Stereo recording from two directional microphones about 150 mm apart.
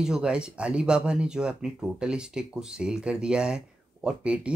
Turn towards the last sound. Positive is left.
turn(degrees=-5)  # may be behind; listen again after turning